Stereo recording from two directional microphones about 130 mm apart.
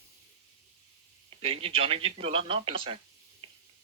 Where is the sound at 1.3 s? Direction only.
50° right (ahead or behind).